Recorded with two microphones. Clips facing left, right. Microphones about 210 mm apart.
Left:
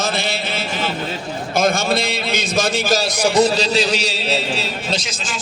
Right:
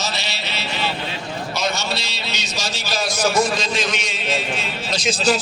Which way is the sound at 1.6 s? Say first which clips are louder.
Left 9 dB; 50° left (ahead or behind).